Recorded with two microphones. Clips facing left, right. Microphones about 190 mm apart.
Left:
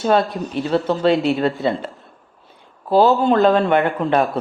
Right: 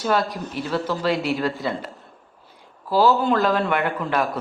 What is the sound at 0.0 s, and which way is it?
A man's voice, 25° left (ahead or behind).